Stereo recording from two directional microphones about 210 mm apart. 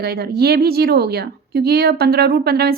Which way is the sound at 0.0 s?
50° right (ahead or behind).